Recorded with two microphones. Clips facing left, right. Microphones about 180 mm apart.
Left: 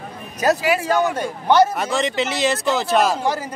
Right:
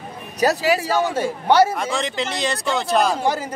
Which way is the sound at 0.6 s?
35° right (ahead or behind).